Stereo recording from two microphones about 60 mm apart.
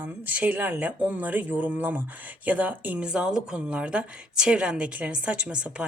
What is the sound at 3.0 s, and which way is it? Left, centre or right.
A woman's voice, centre.